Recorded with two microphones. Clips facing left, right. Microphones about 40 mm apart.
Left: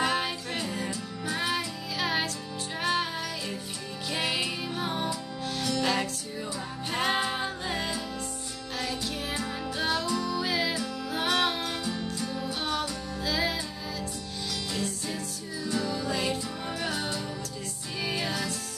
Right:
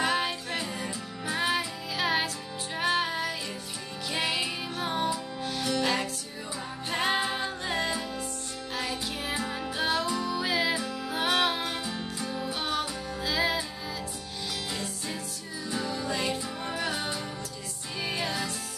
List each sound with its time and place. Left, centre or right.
0.0 s music: centre
14.7 s music: centre